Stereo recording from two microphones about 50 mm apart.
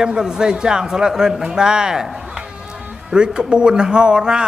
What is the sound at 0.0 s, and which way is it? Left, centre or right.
Speech, centre.